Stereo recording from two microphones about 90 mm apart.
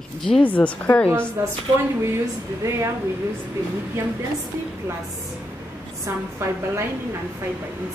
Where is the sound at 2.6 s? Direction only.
30° right (ahead or behind).